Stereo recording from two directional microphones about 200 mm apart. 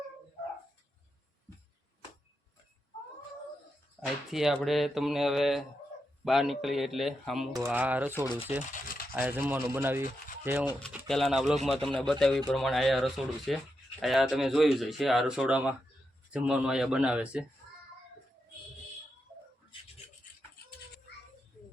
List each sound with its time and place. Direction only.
4.3 s speech: centre (ahead or behind)
7.5 s rub: 10° right (ahead or behind)
8.7 s rub: 45° left (ahead or behind)
9.1 s rub: 10° right (ahead or behind)
10.4 s speech: 10° right (ahead or behind)
19.7 s a sound: 25° left (ahead or behind)